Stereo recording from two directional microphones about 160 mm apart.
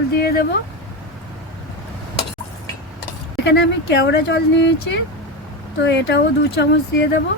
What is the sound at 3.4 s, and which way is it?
Speech, 90° left.